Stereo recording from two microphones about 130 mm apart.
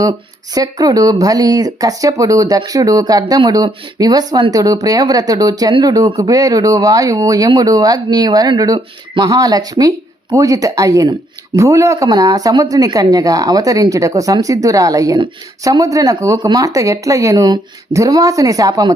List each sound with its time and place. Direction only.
0.0 s speech: 30° right (ahead or behind)